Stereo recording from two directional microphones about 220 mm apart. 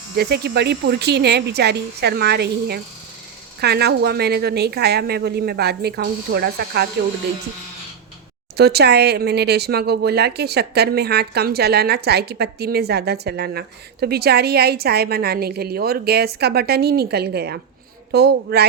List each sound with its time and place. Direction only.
0.2 s a woman's voice: 50° right (ahead or behind)
8.5 s a woman's voice: 45° right (ahead or behind)